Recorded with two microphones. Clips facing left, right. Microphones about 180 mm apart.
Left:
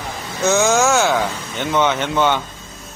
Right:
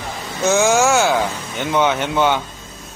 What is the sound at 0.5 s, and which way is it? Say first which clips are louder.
A man's voice: right 1 dB; 10° right (ahead or behind).